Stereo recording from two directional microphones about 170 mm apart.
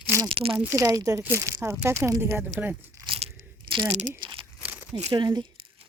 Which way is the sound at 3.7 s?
20° right (ahead or behind).